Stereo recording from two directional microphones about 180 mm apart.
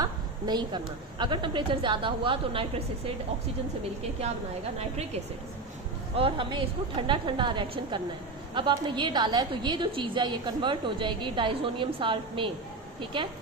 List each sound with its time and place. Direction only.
0.0 s a sound: 25° right (ahead or behind)
1.2 s a woman's voice: 25° right (ahead or behind)
6.1 s a woman's voice: 30° right (ahead or behind)